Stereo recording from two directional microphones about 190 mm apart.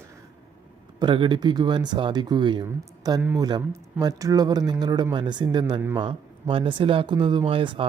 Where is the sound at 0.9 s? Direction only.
25° right (ahead or behind).